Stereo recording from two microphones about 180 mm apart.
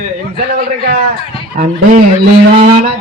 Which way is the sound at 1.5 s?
45° right (ahead or behind).